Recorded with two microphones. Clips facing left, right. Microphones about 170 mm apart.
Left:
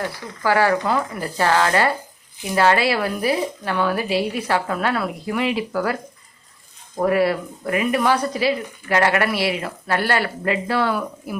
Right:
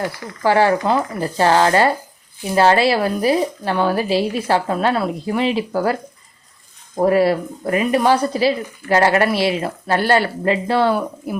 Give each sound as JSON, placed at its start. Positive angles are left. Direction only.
{"t": 0.4, "sound": "speech", "side_deg": -25}